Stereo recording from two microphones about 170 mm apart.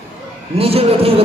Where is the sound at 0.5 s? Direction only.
35° right (ahead or behind).